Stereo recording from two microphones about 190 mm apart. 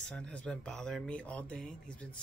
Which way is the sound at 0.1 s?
5° left (ahead or behind).